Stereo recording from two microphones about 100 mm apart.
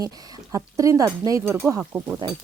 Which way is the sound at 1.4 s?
25° right (ahead or behind).